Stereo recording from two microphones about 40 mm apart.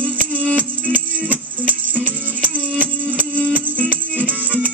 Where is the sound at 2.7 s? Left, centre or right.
Right.